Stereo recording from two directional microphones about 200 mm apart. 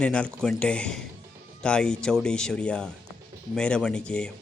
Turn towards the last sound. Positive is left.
turn(degrees=5)  # may be behind; listen again after turning